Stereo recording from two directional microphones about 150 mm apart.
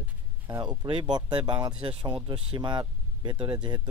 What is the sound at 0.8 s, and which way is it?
Speech, 30° right (ahead or behind).